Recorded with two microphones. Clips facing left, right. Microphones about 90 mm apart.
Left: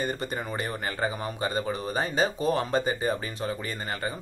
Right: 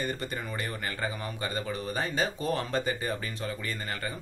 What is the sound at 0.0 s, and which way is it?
Speech, 20° left (ahead or behind).